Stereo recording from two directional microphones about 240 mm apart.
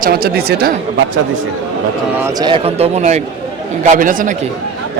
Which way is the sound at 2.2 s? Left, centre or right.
Centre.